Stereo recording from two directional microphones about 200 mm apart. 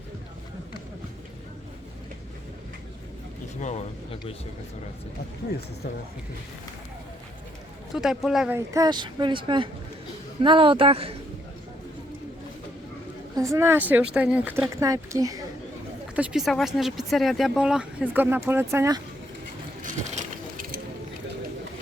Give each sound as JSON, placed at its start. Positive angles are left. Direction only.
{"t": 3.6, "sound": "speech", "side_deg": 35}
{"t": 7.9, "sound": "speech", "side_deg": 0}
{"t": 8.5, "sound": "speech", "side_deg": -15}
{"t": 13.3, "sound": "a woman's voice", "side_deg": -15}
{"t": 16.1, "sound": "speech", "side_deg": -5}
{"t": 19.8, "sound": "a sound", "side_deg": -40}